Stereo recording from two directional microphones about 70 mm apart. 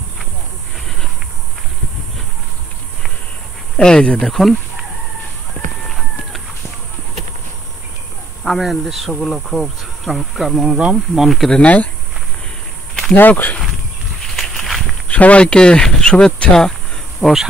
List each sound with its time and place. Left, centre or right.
3.7 s speech: centre
5.9 s chicken: centre
8.5 s speech: centre
11.5 s speech: centre
13.1 s speech: left
14.3 s a sound: centre
15.0 s speech: centre